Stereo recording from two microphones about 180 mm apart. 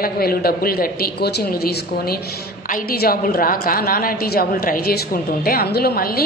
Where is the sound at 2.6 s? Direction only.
50° left (ahead or behind).